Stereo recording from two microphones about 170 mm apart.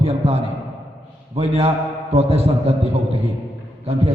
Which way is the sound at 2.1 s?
35° right (ahead or behind).